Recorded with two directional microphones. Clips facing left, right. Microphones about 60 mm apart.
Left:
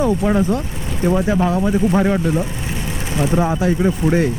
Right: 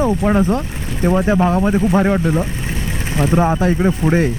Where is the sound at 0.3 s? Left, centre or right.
Right.